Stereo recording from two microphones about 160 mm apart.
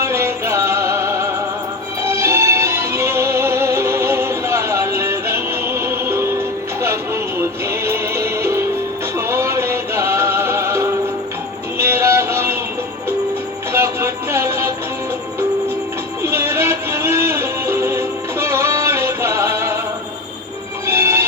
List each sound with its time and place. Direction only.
0.0 s music: 15° right (ahead or behind)
11.8 s a sound: 15° right (ahead or behind)
13.7 s music: 15° right (ahead or behind)
16.2 s music: 15° right (ahead or behind)
20.8 s music: 15° right (ahead or behind)